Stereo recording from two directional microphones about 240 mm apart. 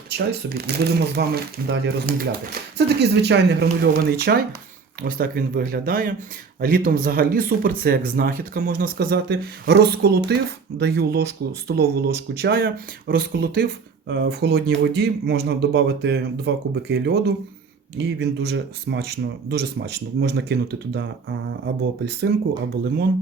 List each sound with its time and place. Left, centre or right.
0.1 s speech: right